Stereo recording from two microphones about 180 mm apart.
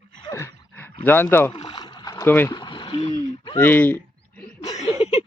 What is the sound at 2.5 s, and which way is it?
Splash, 25° left (ahead or behind).